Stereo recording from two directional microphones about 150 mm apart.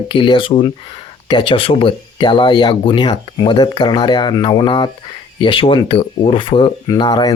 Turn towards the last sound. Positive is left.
turn(degrees=25)  # may be behind; listen again after turning